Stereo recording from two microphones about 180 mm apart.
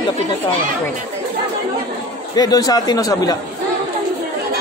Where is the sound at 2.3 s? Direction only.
20° left (ahead or behind).